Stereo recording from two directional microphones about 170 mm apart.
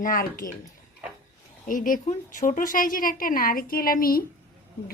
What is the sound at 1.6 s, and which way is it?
A woman's voice, 50° left (ahead or behind).